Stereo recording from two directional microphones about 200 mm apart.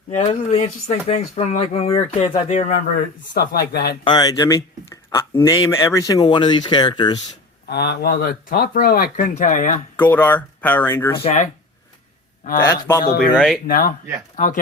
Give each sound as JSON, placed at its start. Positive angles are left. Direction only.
{"t": 0.3, "sound": "speech", "side_deg": 30}
{"t": 3.3, "sound": "speech", "side_deg": 50}
{"t": 4.0, "sound": "speech", "side_deg": 20}
{"t": 7.7, "sound": "speech", "side_deg": 55}
{"t": 10.0, "sound": "speech", "side_deg": 10}
{"t": 11.2, "sound": "speech", "side_deg": 30}
{"t": 12.6, "sound": "speech", "side_deg": 20}
{"t": 13.3, "sound": "speech", "side_deg": 0}
{"t": 13.7, "sound": "speech", "side_deg": 45}